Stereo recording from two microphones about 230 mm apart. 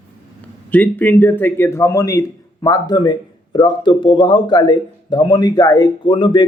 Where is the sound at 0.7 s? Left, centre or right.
Centre.